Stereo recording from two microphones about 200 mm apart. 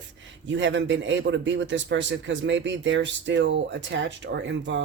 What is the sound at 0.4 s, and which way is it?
A man's voice, 65° right (ahead or behind).